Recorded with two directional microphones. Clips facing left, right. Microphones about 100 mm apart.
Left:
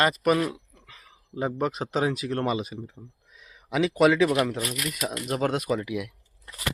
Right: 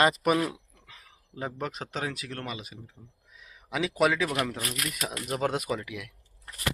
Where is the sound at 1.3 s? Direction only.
10° left (ahead or behind).